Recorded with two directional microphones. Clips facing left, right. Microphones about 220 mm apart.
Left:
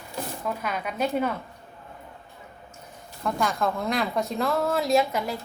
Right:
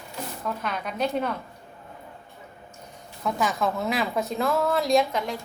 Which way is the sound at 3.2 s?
5° right (ahead or behind).